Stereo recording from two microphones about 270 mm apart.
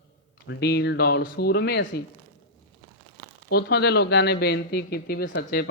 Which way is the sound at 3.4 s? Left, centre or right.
Left.